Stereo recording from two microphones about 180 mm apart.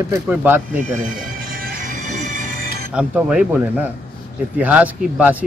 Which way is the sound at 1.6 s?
50° right (ahead or behind).